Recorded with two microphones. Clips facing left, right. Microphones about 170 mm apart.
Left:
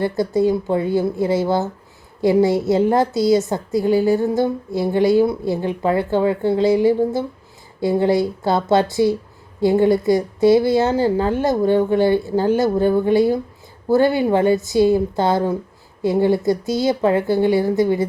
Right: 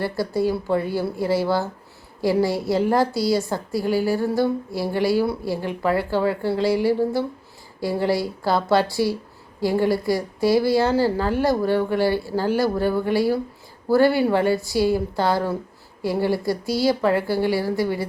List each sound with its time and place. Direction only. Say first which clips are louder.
0.0 s a woman's voice: left 5 dB; 20° left (ahead or behind)